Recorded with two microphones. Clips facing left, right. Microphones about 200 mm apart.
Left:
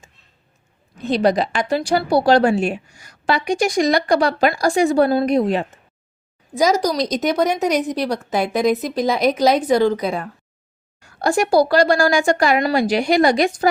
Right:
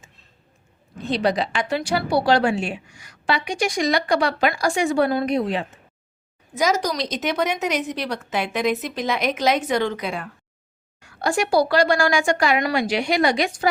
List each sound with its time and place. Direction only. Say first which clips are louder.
1.1 s a woman's voice: left 4 dB; 45° left (ahead or behind)